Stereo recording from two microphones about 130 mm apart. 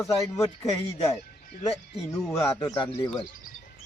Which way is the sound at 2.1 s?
20° left (ahead or behind).